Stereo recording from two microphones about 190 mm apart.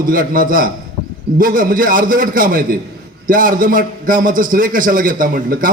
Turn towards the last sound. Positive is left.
turn(degrees=-45)  # may be behind; listen again after turning